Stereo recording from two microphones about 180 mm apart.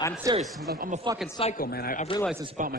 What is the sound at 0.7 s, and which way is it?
Speech, 50° right (ahead or behind).